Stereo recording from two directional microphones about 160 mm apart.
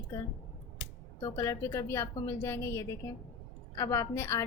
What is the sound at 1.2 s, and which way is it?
A woman's voice, 20° left (ahead or behind).